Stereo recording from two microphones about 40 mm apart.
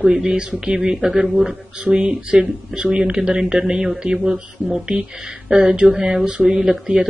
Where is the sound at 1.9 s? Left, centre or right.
Right.